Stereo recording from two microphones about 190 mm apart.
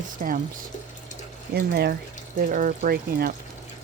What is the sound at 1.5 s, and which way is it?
Speech, 60° right (ahead or behind).